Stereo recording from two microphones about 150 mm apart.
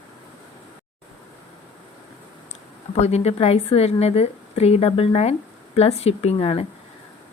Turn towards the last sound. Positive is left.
turn(degrees=40)  # may be behind; listen again after turning